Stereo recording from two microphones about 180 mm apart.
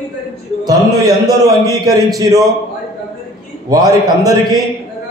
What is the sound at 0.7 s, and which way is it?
Speech, 20° right (ahead or behind).